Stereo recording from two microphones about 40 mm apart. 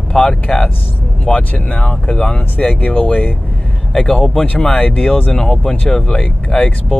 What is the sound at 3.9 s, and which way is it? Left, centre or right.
Speech, centre.